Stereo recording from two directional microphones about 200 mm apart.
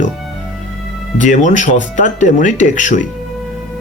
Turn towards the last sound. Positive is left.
turn(degrees=40)  # may be behind; listen again after turning